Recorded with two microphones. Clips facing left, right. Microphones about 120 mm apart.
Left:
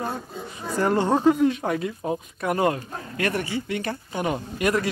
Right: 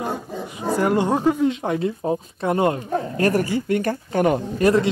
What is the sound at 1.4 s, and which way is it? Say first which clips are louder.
Speech: right 1 dB; 20° right (ahead or behind).